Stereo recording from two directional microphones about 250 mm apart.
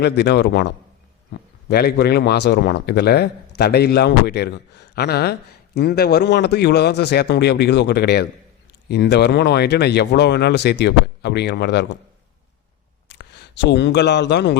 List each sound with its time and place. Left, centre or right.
0.0 s a man's voice: left
13.1 s speech: left